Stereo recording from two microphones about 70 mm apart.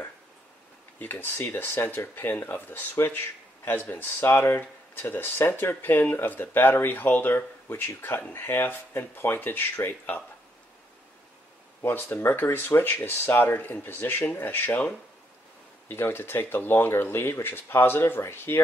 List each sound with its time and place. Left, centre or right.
0.9 s speech: left
11.8 s speech: left
15.9 s speech: left